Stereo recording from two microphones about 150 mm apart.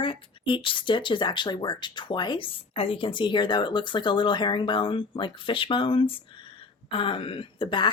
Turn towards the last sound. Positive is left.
turn(degrees=35)  # may be behind; listen again after turning